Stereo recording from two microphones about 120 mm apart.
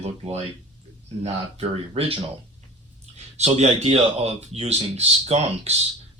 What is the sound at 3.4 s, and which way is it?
Speech, 70° right (ahead or behind).